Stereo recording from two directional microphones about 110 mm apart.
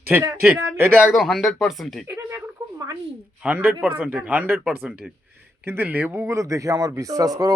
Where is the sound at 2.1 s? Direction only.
30° right (ahead or behind).